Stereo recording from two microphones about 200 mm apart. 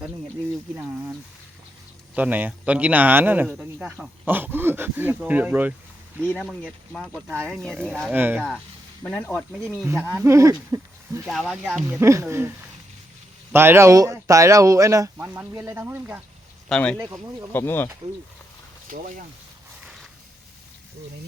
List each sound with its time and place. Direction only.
2.1 s speech: 10° right (ahead or behind)
6.1 s speech: 5° left (ahead or behind)
8.1 s speech: 10° right (ahead or behind)
9.0 s speech: 5° left (ahead or behind)
9.8 s speech: 15° right (ahead or behind)
11.3 s speech: centre (ahead or behind)
11.9 s speech: 15° right (ahead or behind)
16.6 s speech: 5° left (ahead or behind)
17.0 s speech: 15° right (ahead or behind)
17.5 s speech: 10° left (ahead or behind)
18.9 s speech: 40° right (ahead or behind)